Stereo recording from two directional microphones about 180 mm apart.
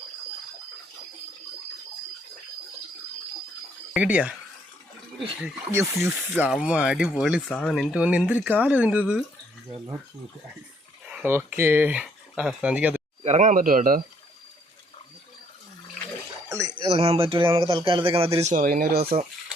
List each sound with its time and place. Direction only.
3.9 s speech: 5° right (ahead or behind)
5.4 s speech: 5° right (ahead or behind)
11.0 s speech: 5° right (ahead or behind)
13.2 s speech: 40° right (ahead or behind)
16.5 s a sound: 15° right (ahead or behind)
16.7 s speech: 35° right (ahead or behind)
18.3 s speech: 45° right (ahead or behind)